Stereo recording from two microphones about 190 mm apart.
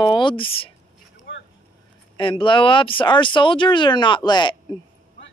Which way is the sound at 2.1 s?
25° left (ahead or behind).